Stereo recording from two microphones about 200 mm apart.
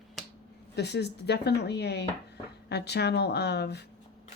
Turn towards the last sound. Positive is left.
turn(degrees=55)  # may be behind; listen again after turning